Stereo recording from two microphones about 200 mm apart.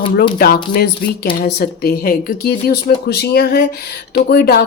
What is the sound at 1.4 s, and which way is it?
Speech, 50° left (ahead or behind).